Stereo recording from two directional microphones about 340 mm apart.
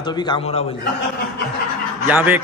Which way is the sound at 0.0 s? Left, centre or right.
Centre.